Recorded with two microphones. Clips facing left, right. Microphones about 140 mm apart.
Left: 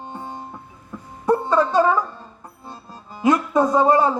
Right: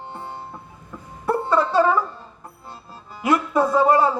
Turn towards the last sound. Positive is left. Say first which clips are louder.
# left 1 dB
turn(degrees=20)  # may be behind; listen again after turning